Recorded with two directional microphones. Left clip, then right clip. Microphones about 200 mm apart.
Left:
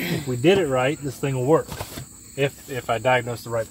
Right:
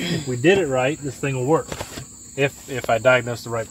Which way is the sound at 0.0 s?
10° right (ahead or behind).